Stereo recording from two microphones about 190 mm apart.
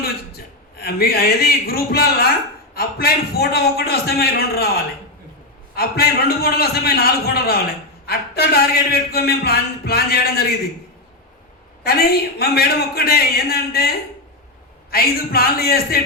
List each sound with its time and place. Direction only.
0.0 s a man's voice: 55° left (ahead or behind)
5.7 s speech: 55° left (ahead or behind)
11.8 s a man's voice: 55° left (ahead or behind)